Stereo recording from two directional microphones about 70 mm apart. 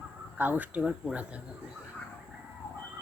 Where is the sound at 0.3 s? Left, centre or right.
Right.